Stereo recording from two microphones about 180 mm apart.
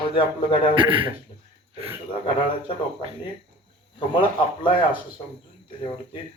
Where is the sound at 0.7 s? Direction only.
30° right (ahead or behind).